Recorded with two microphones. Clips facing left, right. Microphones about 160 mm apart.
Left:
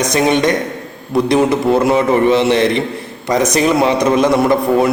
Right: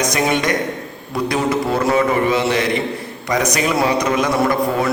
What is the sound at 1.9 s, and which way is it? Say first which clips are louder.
A man's voice: left 4 dB; 25° left (ahead or behind).